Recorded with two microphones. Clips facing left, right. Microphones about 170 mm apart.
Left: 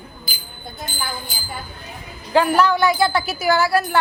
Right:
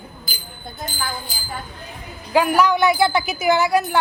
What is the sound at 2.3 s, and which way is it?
A woman's voice, 10° right (ahead or behind).